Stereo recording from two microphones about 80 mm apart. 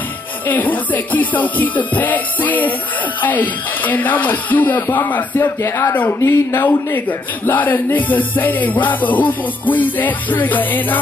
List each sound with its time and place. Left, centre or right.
0.5 s speech: left